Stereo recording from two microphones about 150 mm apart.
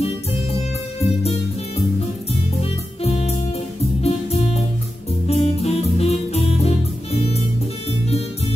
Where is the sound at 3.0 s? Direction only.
45° left (ahead or behind).